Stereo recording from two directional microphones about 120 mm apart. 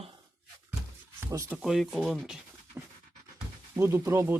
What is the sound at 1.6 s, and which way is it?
Speech, centre (ahead or behind).